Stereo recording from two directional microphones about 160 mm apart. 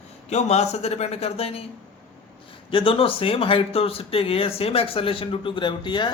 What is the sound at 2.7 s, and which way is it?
Speech, 35° left (ahead or behind).